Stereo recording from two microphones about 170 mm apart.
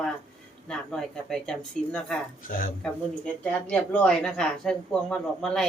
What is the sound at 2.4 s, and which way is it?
Speech, 55° left (ahead or behind).